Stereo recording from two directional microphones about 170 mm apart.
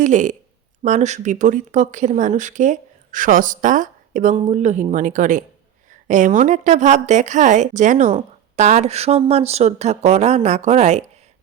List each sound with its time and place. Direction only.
0.0 s a woman's voice: 45° right (ahead or behind)